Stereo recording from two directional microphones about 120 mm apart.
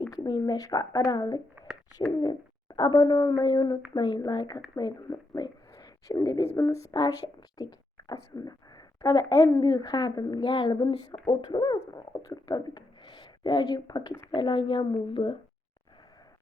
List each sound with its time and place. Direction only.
0.1 s a woman's voice: 35° left (ahead or behind)